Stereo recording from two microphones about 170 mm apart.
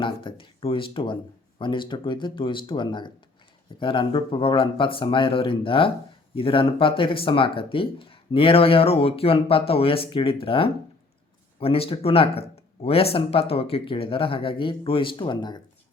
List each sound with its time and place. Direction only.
0.0 s speech: 30° left (ahead or behind)